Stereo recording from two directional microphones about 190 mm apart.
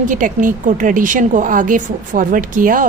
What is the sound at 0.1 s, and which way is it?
A woman's voice, 45° right (ahead or behind).